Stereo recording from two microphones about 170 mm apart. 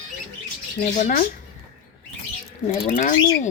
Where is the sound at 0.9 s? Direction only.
50° left (ahead or behind).